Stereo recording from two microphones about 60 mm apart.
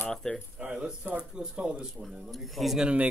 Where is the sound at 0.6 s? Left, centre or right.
Right.